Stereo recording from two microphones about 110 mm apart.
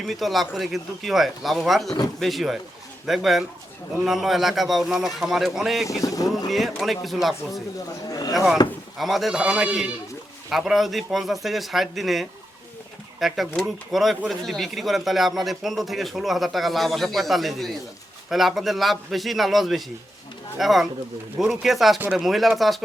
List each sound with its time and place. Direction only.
0.0 s speech: centre (ahead or behind)
6.0 s speech: 30° left (ahead or behind)
6.5 s speech: centre (ahead or behind)
8.1 s a sound: 35° left (ahead or behind)
9.0 s speech: centre (ahead or behind)